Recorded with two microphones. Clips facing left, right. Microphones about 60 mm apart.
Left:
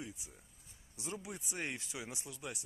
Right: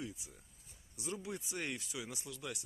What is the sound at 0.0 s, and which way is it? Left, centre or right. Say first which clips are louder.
Speech: right 2 dB; left.